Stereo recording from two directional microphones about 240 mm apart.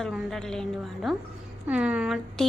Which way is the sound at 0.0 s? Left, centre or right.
Centre.